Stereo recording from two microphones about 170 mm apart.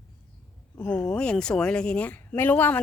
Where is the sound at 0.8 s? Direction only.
10° left (ahead or behind).